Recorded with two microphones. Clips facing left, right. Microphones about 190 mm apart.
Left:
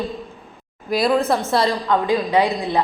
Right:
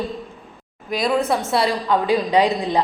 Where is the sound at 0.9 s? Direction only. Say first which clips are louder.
Left 2 dB; 5° left (ahead or behind).